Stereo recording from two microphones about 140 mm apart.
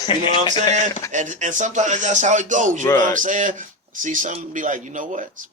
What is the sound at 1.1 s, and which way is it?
Speech, 65° right (ahead or behind).